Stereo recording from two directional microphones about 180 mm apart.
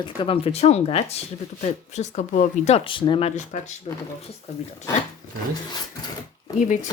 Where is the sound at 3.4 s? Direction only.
40° left (ahead or behind).